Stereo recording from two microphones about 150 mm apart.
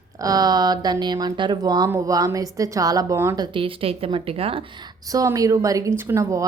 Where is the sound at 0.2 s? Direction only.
25° right (ahead or behind).